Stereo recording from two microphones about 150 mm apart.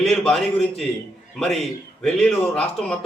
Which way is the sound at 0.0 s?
Centre (ahead or behind).